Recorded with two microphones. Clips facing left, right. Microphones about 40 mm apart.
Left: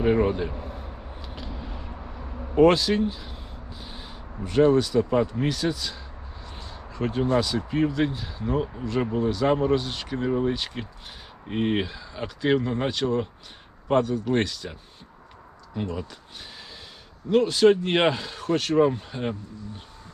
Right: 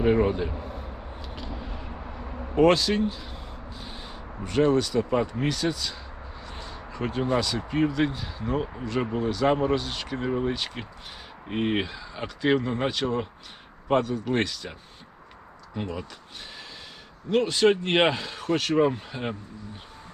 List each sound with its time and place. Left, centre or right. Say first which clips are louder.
0.0 s a sound: even; centre
2.6 s speech: left 2 dB; centre
6.4 s a sound: right 1 dB; centre
7.3 s speech: left 2 dB; centre
9.7 s speech: left 2 dB; centre
10.2 s speech: left 3 dB; centre
10.5 s speech: left 1 dB; centre
17.3 s speech: left 3 dB; centre